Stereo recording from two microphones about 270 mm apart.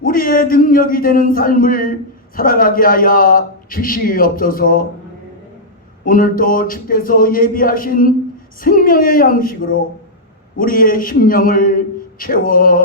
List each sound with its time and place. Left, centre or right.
0.0 s a man's voice: left
6.1 s a man's voice: left